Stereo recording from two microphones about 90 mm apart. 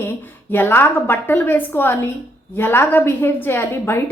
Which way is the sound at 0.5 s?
25° left (ahead or behind).